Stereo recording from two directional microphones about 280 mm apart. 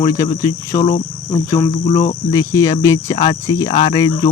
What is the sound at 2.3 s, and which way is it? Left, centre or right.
Speech, centre.